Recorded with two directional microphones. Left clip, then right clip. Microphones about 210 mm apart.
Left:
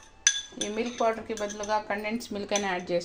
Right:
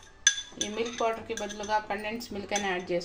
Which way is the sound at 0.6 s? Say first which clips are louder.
Left 1 dB; 25° left (ahead or behind).